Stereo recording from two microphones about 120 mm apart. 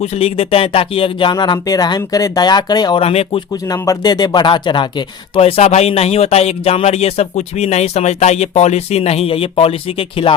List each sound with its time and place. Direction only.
0.0 s speech: 60° left (ahead or behind); by 3.0 s 35° left (ahead or behind)
3.0 s speech: 55° left (ahead or behind)
3.5 s speech: 30° left (ahead or behind); by 10.3 s 50° left (ahead or behind)